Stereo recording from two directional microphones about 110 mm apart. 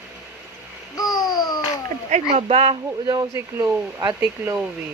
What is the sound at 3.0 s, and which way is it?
Speech, 40° right (ahead or behind).